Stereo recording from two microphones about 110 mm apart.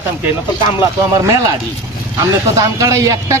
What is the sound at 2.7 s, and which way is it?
Speech, 30° right (ahead or behind).